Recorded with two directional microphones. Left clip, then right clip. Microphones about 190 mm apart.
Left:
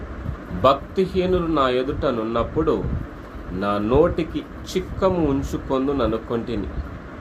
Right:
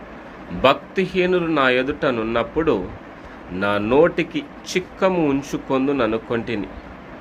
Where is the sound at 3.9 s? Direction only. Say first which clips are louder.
Right 2 dB; 20° right (ahead or behind).